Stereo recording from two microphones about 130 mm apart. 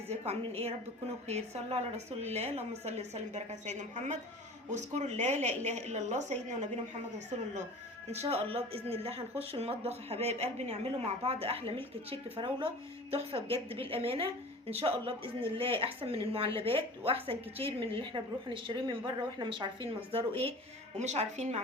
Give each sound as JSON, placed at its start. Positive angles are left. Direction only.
{"t": 0.1, "sound": "a woman's voice", "side_deg": -55}
{"t": 8.1, "sound": "speech", "side_deg": -55}
{"t": 13.1, "sound": "speech", "side_deg": -50}
{"t": 21.0, "sound": "a woman's voice", "side_deg": -60}